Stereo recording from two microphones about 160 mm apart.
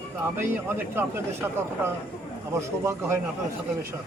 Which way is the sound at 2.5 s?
15° right (ahead or behind).